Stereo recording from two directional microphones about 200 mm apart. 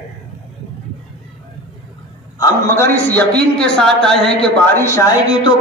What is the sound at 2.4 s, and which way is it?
A man's voice, 10° left (ahead or behind).